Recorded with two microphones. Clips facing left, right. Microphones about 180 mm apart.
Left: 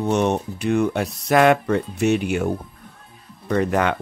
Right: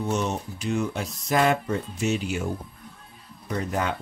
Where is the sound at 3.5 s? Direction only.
75° left (ahead or behind).